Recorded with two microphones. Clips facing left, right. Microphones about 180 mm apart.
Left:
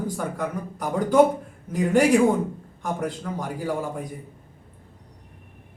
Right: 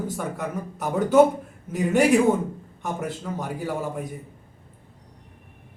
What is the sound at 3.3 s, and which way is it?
Speech, 10° right (ahead or behind).